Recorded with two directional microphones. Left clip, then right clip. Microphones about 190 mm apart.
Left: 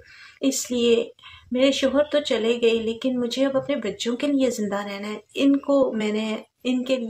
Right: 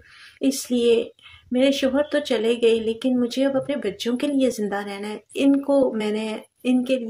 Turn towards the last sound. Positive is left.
turn(degrees=-15)  # may be behind; listen again after turning